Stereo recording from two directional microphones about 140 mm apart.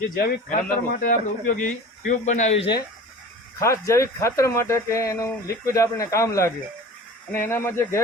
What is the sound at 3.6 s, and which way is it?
Speech, 20° left (ahead or behind).